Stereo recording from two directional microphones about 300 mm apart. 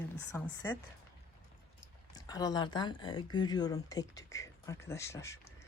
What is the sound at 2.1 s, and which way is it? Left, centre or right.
Speech, centre.